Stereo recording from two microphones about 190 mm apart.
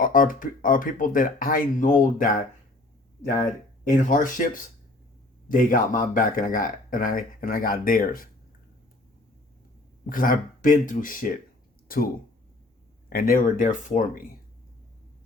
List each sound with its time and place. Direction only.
0.0 s speech: 45° left (ahead or behind)
3.8 s speech: 45° left (ahead or behind)
10.1 s speech: 45° left (ahead or behind)
13.1 s speech: 50° left (ahead or behind)